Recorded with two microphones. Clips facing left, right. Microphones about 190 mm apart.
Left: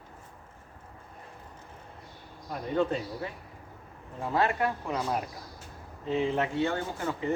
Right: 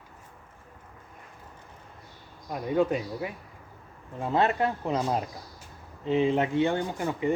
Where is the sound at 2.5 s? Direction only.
15° right (ahead or behind).